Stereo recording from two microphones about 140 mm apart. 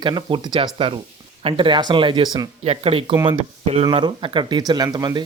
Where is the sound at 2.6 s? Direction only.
45° right (ahead or behind).